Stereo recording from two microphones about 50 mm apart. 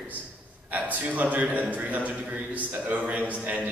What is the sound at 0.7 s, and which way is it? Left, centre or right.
A man's voice, right.